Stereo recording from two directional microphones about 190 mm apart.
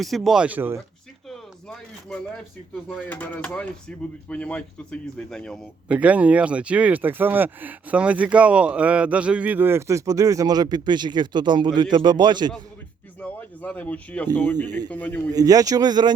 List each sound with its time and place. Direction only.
0.0 s speech: centre (ahead or behind)
1.3 s a sound: 5° left (ahead or behind)
2.9 s speech: 10° left (ahead or behind)
5.9 s speech: 5° right (ahead or behind); by 12.5 s 25° right (ahead or behind)
13.1 s speech: 10° left (ahead or behind)
15.3 s speech: 20° right (ahead or behind)